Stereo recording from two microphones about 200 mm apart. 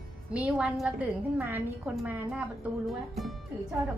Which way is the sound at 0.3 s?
5° right (ahead or behind).